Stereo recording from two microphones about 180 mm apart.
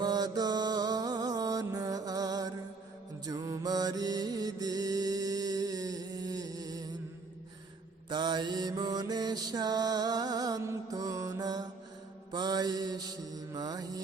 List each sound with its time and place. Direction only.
0.0 s music: 25° right (ahead or behind)
3.2 s mantra: 20° right (ahead or behind)
8.1 s mantra: 25° right (ahead or behind)